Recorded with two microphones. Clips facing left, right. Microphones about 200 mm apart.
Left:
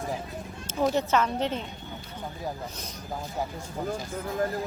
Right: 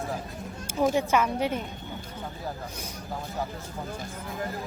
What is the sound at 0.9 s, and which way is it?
Speech, 10° right (ahead or behind).